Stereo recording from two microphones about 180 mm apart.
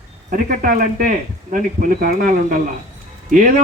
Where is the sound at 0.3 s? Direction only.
50° right (ahead or behind).